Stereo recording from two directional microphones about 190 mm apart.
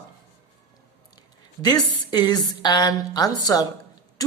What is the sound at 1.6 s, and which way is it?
A woman's voice, 20° left (ahead or behind).